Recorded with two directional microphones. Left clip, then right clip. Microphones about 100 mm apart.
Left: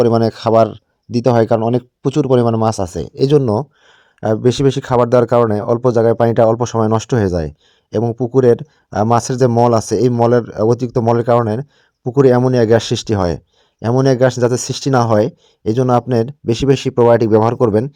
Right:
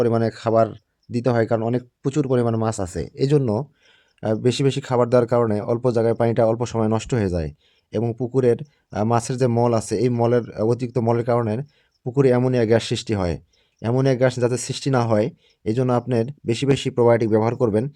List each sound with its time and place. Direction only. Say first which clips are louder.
0.0 s speech: left 7 dB; 45° left (ahead or behind)